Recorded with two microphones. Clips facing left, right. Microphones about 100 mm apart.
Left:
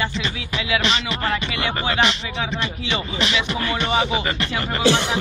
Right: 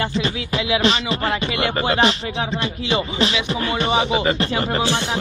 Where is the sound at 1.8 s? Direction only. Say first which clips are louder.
Right 3 dB; 40° right (ahead or behind).